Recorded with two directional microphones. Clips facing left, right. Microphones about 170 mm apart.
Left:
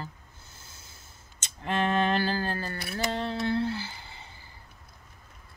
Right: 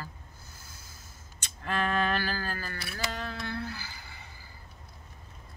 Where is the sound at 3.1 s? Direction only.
25° left (ahead or behind).